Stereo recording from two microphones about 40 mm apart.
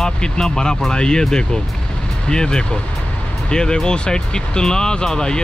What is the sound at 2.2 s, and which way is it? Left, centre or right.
Speech, centre.